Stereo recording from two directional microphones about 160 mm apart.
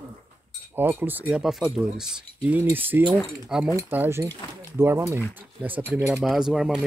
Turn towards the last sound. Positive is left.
turn(degrees=0)  # may be behind; listen again after turning